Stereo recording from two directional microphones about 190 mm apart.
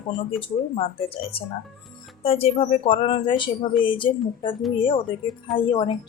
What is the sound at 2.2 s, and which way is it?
Speech, 30° left (ahead or behind).